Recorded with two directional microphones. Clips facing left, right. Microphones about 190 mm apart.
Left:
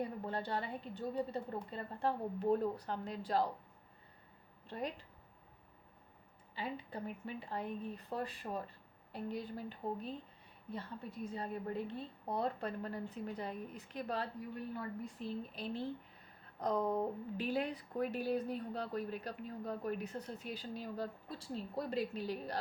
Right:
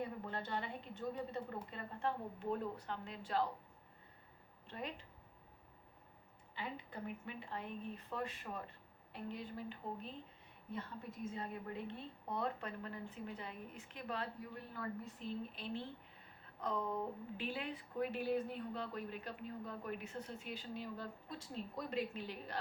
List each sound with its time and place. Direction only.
0.3 s a woman's voice: 35° left (ahead or behind)
4.7 s a woman's voice: 35° left (ahead or behind)
6.6 s a woman's voice: 35° left (ahead or behind)
15.5 s a woman's voice: 40° left (ahead or behind)